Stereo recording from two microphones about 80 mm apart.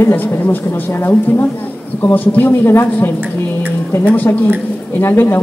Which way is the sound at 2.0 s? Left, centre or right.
Left.